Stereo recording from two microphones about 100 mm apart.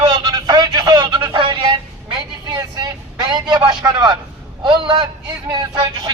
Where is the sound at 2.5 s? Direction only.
40° right (ahead or behind).